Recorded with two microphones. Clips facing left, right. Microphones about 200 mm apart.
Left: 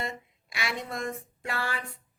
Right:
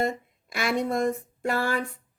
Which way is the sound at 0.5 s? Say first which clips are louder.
Right 9 dB; 45° right (ahead or behind).